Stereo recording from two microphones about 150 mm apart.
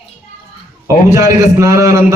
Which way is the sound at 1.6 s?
20° right (ahead or behind).